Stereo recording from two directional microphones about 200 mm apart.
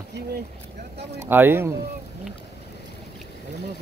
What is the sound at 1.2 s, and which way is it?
Speech, 10° right (ahead or behind).